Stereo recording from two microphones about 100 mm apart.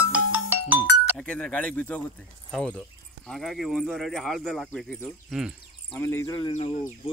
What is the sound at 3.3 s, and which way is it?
Speech, centre (ahead or behind).